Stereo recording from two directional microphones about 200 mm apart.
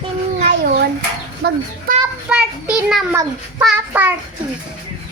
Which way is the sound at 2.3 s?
5° right (ahead or behind).